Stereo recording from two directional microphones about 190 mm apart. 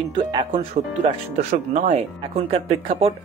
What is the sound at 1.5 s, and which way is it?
Speech, 40° right (ahead or behind).